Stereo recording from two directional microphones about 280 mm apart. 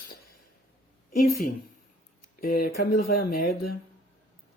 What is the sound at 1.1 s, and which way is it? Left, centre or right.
Speech, left.